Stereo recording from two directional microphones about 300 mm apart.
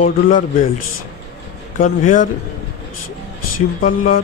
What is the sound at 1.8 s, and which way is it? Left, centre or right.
Speech, left.